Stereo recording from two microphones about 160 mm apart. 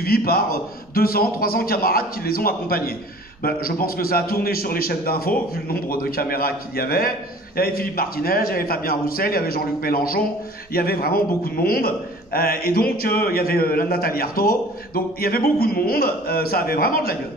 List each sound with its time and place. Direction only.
0.0 s a man's voice: 70° left (ahead or behind)